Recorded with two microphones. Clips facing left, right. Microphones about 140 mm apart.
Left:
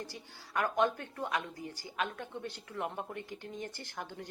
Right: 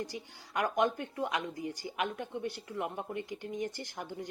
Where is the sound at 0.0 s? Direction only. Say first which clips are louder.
Right 5 dB; 15° right (ahead or behind).